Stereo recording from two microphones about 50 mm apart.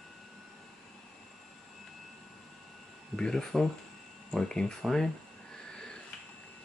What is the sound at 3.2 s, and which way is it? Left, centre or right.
Speech, centre.